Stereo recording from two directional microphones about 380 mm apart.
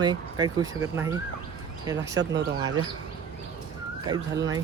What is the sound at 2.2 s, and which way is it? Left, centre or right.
Speech, right.